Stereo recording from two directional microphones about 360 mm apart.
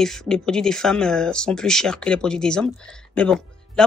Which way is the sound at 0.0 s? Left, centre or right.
Centre.